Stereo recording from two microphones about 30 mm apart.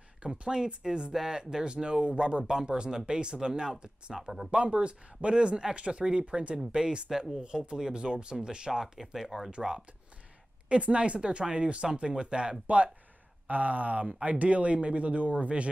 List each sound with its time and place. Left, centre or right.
0.2 s speech: right; by 4.5 s centre
4.5 s speech: right
6.7 s speech: right
8.9 s speech: centre
10.7 s speech: right
11.1 s speech: right
12.6 s speech: right
13.5 s speech: right